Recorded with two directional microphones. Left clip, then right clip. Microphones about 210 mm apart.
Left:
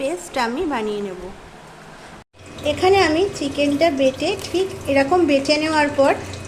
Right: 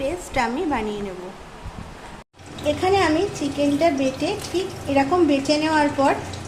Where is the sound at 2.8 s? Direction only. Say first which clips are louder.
Left 4 dB; 20° left (ahead or behind).